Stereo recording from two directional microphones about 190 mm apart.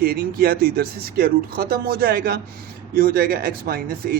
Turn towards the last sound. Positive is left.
turn(degrees=-50)  # may be behind; listen again after turning